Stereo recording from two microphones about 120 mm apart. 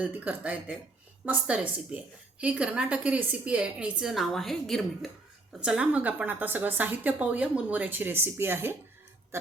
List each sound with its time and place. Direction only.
0.0 s a woman's voice: 10° right (ahead or behind)
9.3 s burping: 20° right (ahead or behind)